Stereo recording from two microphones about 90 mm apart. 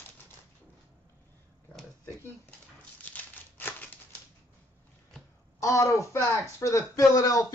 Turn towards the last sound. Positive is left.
turn(degrees=40)  # may be behind; listen again after turning